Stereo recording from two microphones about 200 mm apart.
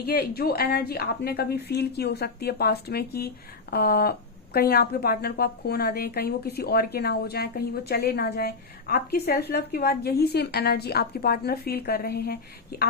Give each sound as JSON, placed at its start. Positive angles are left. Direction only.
{"t": 0.0, "sound": "a woman's voice", "side_deg": 50}